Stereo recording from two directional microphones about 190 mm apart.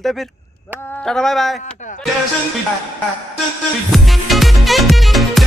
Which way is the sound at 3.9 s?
Centre (ahead or behind).